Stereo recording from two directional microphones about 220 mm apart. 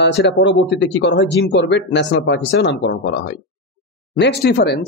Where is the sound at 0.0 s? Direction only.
50° left (ahead or behind).